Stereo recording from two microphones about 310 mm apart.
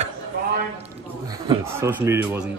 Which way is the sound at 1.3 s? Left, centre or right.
Centre.